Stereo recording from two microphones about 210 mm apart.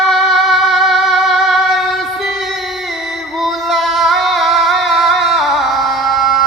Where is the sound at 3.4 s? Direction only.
Centre (ahead or behind).